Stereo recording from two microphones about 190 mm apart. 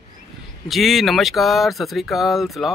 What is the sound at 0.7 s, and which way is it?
Speech, centre (ahead or behind).